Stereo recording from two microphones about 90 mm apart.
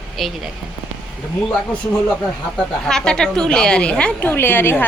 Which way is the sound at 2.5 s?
5° left (ahead or behind).